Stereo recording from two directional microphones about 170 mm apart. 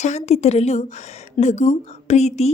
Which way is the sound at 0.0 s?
40° left (ahead or behind).